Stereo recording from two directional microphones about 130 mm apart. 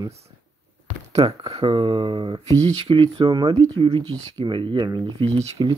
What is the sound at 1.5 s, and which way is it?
Speech, 40° right (ahead or behind).